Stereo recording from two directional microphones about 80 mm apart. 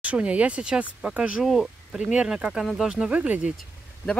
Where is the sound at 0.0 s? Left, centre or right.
Centre.